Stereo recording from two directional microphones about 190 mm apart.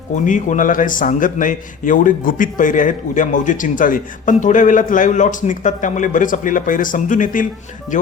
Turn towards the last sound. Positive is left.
turn(degrees=45)  # may be behind; listen again after turning